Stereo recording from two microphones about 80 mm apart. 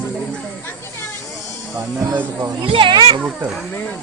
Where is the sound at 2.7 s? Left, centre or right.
Right.